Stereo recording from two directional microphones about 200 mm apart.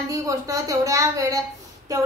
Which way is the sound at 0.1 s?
15° right (ahead or behind).